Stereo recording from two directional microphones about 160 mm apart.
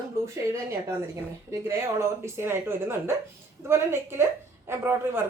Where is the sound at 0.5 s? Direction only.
15° right (ahead or behind).